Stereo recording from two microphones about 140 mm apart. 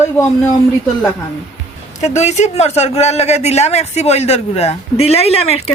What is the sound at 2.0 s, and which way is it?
Speech, 55° left (ahead or behind).